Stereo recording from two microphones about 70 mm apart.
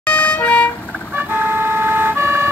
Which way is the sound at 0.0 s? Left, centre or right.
Left.